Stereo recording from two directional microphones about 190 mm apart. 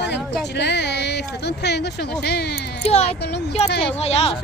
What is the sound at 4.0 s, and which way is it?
Speech, 35° left (ahead or behind).